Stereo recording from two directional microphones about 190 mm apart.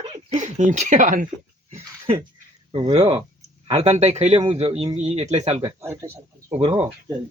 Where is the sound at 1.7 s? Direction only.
30° right (ahead or behind).